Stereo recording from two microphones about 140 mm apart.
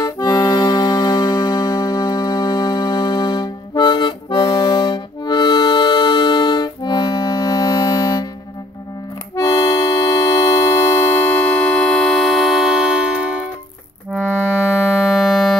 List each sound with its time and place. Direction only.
0.0 s music: 25° left (ahead or behind)
9.3 s accordion: 20° left (ahead or behind); by 13.5 s 5° right (ahead or behind)
15.0 s music: centre (ahead or behind)